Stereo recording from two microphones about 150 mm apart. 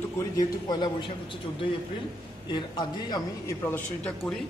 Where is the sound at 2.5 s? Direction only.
30° left (ahead or behind).